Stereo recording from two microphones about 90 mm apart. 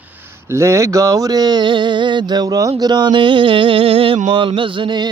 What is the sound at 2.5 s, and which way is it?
Mantra, 45° right (ahead or behind).